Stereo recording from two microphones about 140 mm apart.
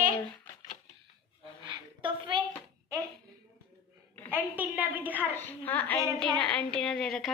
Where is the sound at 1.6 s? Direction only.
35° right (ahead or behind).